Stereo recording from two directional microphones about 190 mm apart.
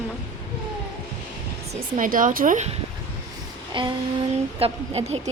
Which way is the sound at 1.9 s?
45° right (ahead or behind).